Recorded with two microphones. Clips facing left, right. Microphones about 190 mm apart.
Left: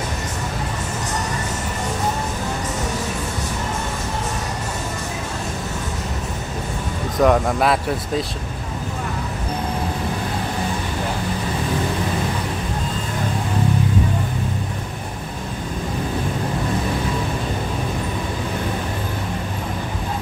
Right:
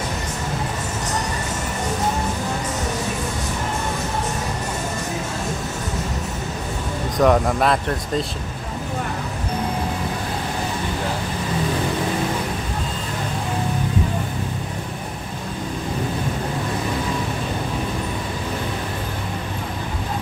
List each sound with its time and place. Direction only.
7.2 s speech: centre (ahead or behind)